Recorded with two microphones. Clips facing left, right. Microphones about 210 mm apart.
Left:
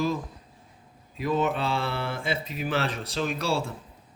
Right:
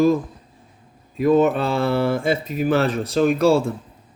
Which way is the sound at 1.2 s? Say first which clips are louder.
Right 10 dB; 50° right (ahead or behind).